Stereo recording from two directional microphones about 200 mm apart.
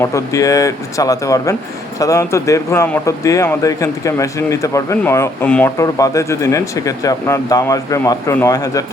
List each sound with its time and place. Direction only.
0.0 s speech: 15° left (ahead or behind)